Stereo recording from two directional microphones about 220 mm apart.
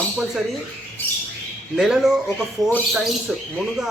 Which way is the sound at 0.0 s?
Centre (ahead or behind).